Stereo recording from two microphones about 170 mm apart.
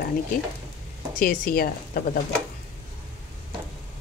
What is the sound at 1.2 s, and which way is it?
Speech, 55° left (ahead or behind).